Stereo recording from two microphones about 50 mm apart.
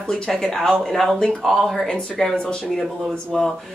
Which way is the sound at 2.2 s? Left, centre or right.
Centre.